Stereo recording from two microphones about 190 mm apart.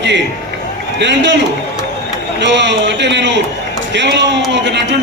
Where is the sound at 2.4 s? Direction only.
70° right (ahead or behind).